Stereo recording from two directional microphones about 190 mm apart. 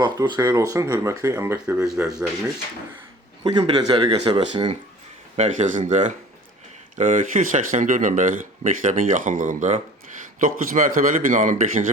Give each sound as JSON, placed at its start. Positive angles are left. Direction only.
{"t": 0.0, "sound": "speech", "side_deg": -20}
{"t": 3.4, "sound": "speech", "side_deg": -20}
{"t": 5.4, "sound": "speech", "side_deg": -40}